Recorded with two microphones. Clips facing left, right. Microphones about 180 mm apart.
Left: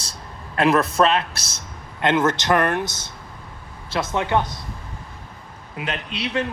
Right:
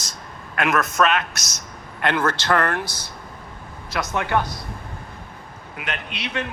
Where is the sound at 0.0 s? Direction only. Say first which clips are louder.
Even; 30° left (ahead or behind).